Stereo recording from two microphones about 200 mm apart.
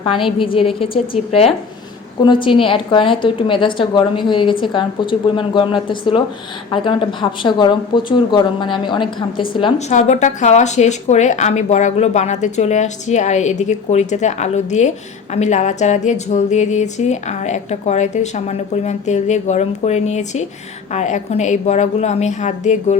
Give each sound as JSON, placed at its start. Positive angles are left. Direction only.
{"t": 0.0, "sound": "speech", "side_deg": 25}
{"t": 9.9, "sound": "a woman's voice", "side_deg": 35}